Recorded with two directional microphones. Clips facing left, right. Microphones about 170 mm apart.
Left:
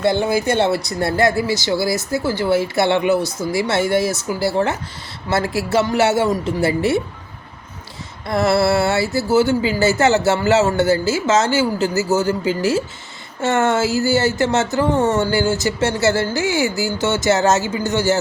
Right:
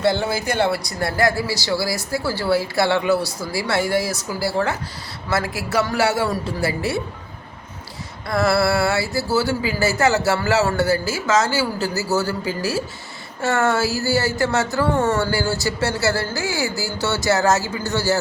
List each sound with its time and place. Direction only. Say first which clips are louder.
0.0 s speech: left 3 dB; 20° left (ahead or behind)
8.3 s speech: left 2 dB; 25° left (ahead or behind)